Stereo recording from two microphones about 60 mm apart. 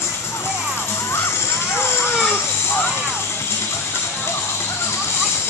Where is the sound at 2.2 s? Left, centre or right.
Left.